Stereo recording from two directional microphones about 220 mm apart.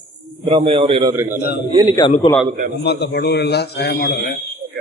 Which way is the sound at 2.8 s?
50° left (ahead or behind).